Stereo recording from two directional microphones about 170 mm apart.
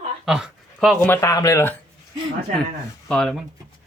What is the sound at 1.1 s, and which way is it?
Speech, 20° left (ahead or behind).